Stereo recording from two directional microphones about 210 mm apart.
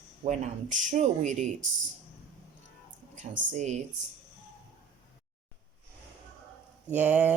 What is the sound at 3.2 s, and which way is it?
Speech, 35° right (ahead or behind).